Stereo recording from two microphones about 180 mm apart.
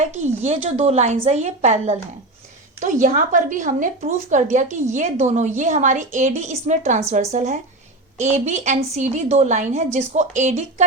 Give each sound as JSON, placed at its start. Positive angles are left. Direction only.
{"t": 0.4, "sound": "a woman's voice", "side_deg": -35}